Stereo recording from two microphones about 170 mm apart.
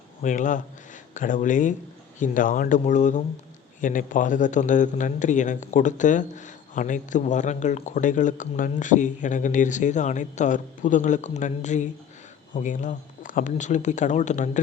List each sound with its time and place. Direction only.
0.2 s a man's voice: 50° left (ahead or behind)